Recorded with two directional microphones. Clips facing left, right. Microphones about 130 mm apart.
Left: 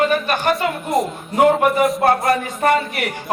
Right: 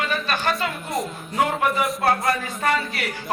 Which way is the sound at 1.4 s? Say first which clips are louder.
Left 8 dB; 40° left (ahead or behind).